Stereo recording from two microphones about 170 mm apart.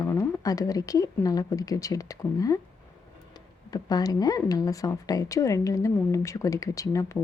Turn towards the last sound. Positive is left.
turn(degrees=20)  # may be behind; listen again after turning